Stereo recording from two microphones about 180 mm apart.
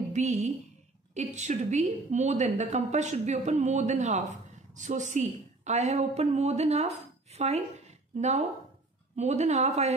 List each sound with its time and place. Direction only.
0.1 s a woman's voice: 40° right (ahead or behind)